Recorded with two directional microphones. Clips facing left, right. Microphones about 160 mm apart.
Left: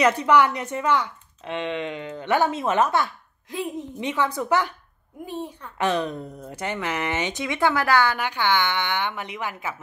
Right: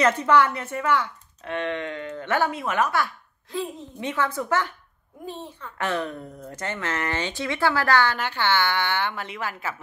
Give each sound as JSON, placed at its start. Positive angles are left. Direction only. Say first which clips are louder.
{"t": 0.0, "sound": "a child's voice", "louder": "left 1 dB", "side_deg": 15}